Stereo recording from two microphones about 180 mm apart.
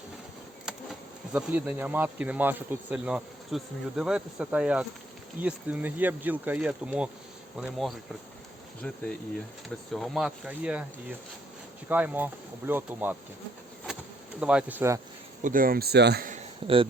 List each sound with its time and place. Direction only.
0.6 s bee: 5° right (ahead or behind)
5.4 s speech: 10° right (ahead or behind)
9.6 s speech: centre (ahead or behind)
13.9 s bee: 5° right (ahead or behind)
14.3 s speech: 5° right (ahead or behind)
15.4 s speech: 50° right (ahead or behind); by 16.2 s 65° right (ahead or behind)
16.2 s a sound: 40° right (ahead or behind)